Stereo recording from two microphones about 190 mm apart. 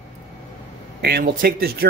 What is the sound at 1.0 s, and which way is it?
Speech, 55° right (ahead or behind).